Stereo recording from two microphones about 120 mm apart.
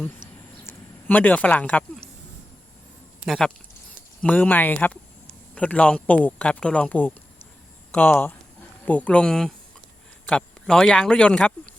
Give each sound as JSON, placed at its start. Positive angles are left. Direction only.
{"t": 0.6, "sound": "speech", "side_deg": 20}
{"t": 4.2, "sound": "speech", "side_deg": 10}